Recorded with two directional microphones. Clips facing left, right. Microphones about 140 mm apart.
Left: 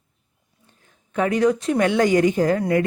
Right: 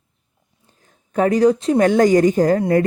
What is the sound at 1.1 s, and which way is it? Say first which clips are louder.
Speech: right 4 dB; 40° right (ahead or behind).